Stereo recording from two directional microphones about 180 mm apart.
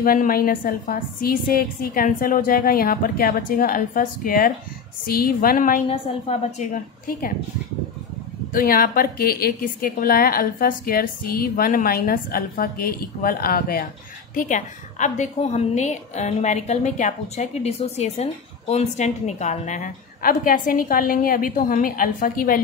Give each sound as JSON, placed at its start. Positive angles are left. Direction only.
{"t": 0.0, "sound": "a woman's voice", "side_deg": 50}
{"t": 5.9, "sound": "a woman's voice", "side_deg": 35}
{"t": 8.5, "sound": "a woman's voice", "side_deg": 55}
{"t": 14.3, "sound": "a woman's voice", "side_deg": 45}